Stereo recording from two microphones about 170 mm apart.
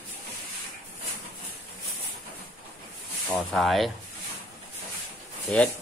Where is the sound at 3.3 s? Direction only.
Centre (ahead or behind).